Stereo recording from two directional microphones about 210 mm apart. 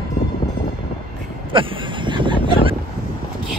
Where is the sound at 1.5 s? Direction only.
25° right (ahead or behind).